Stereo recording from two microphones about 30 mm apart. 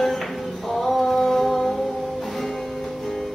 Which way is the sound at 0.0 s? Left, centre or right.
Centre.